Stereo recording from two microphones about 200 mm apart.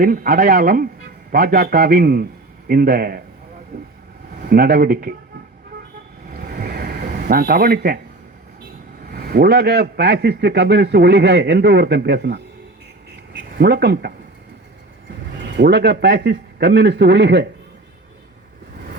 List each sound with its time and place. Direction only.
0.0 s a man's voice: 45° right (ahead or behind)
4.4 s a man's voice: 50° right (ahead or behind)
6.3 s a sound: 50° right (ahead or behind)
9.0 s a man's voice: 50° right (ahead or behind)
13.6 s a man's voice: 55° right (ahead or behind)
15.5 s a man's voice: 55° right (ahead or behind)